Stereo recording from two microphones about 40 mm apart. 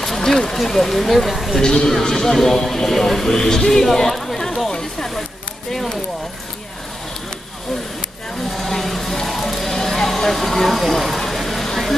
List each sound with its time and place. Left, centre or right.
0.0 s speech: centre
1.6 s speech: centre
5.7 s speech: centre
8.5 s vehicle: centre